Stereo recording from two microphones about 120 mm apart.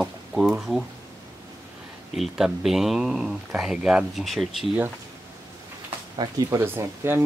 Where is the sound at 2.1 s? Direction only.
5° right (ahead or behind).